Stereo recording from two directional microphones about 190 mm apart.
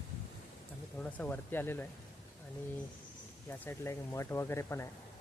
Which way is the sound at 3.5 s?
15° left (ahead or behind).